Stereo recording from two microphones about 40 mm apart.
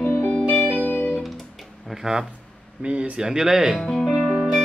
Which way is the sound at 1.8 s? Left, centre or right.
Centre.